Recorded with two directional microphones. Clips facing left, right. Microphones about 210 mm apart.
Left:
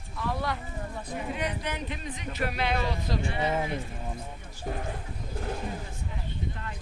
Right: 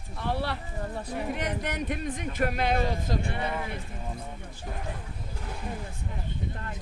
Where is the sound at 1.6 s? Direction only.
50° right (ahead or behind).